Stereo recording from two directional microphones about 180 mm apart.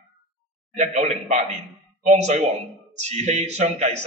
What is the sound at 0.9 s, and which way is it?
A man's voice, 40° right (ahead or behind).